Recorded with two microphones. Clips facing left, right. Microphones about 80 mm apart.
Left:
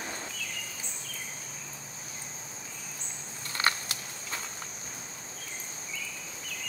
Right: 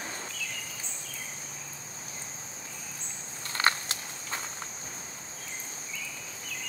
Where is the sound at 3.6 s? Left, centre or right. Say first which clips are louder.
Right 2 dB; right.